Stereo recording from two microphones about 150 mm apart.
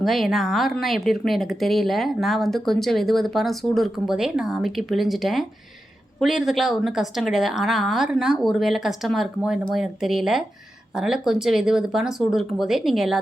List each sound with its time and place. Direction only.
0.0 s speech: centre (ahead or behind)